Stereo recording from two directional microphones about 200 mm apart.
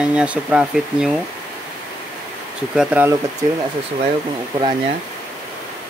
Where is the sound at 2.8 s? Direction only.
5° right (ahead or behind).